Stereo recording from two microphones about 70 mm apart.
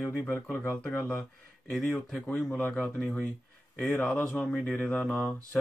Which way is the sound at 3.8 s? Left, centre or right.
Left.